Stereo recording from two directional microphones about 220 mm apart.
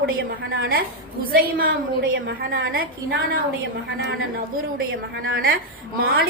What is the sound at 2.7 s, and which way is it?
Speech, 40° right (ahead or behind).